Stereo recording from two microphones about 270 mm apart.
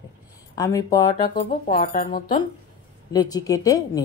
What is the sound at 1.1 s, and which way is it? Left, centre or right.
Speech, left.